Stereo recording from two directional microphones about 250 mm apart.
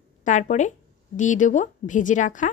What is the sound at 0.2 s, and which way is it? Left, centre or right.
Speech, left.